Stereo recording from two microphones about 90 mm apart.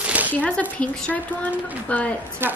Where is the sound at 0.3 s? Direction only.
15° left (ahead or behind).